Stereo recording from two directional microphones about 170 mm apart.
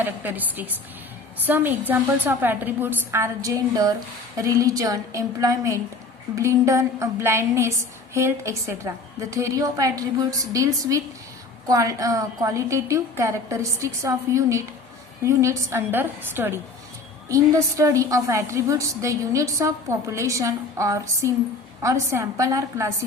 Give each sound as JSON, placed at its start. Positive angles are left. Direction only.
{"t": 0.0, "sound": "a woman's voice", "side_deg": -10}